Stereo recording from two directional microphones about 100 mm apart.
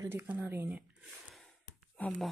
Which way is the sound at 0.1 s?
20° right (ahead or behind).